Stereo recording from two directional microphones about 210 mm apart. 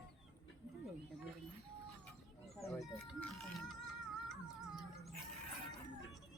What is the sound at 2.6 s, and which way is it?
Chicken, 15° left (ahead or behind).